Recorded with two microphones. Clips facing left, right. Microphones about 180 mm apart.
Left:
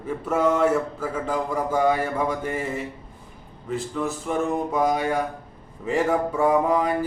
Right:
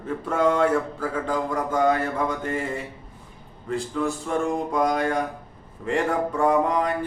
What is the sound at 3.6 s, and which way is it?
Mantra, centre (ahead or behind).